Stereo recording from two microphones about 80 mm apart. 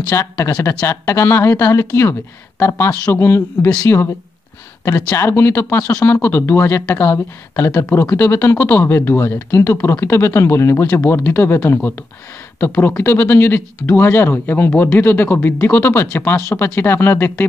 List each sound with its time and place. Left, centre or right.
0.1 s speech: left